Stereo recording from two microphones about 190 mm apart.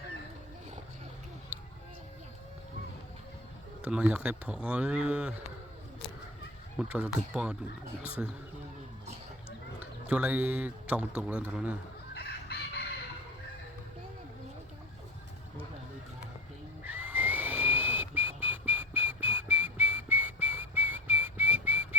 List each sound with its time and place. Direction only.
3.8 s a man's voice: 5° right (ahead or behind)
6.7 s a man's voice: 10° right (ahead or behind)
9.8 s a man's voice: 5° right (ahead or behind)
12.1 s chicken: 60° left (ahead or behind)
16.8 s whistling: 10° right (ahead or behind)